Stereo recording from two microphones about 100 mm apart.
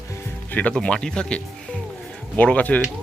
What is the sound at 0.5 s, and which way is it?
Speech, 15° left (ahead or behind).